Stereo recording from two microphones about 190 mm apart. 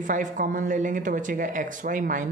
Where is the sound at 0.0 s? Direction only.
45° right (ahead or behind).